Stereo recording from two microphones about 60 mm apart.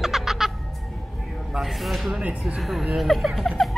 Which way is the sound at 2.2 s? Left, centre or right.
Right.